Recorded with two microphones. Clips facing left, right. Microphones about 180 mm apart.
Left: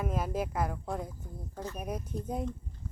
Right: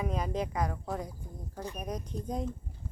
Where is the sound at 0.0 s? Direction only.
5° left (ahead or behind).